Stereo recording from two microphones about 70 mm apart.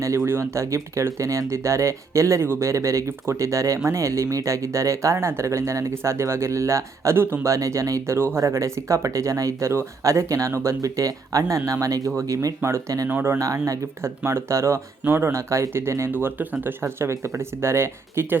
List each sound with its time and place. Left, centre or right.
0.3 s speech: right
7.4 s speech: right
12.6 s speech: right
13.1 s speech: right
13.4 s speech: right
14.3 s speech: right
15.3 s speech: right
16.1 s speech: right
16.8 s speech: right